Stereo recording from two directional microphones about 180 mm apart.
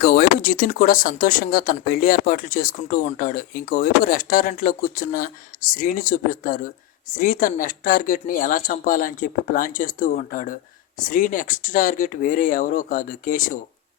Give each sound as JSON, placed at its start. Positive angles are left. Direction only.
{"t": 0.0, "sound": "speech", "side_deg": 55}